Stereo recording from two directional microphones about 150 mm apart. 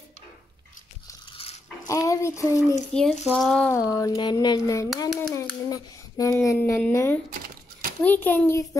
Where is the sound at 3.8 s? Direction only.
20° left (ahead or behind).